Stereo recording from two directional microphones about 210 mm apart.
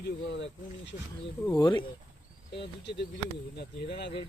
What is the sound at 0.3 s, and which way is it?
Speech, 55° left (ahead or behind).